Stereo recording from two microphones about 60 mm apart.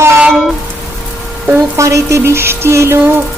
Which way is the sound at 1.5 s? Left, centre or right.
Right.